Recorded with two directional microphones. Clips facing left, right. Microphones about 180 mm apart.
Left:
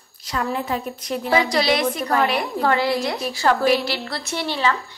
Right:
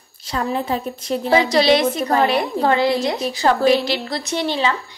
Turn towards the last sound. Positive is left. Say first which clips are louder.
# right 2 dB
turn(degrees=-20)  # may be behind; listen again after turning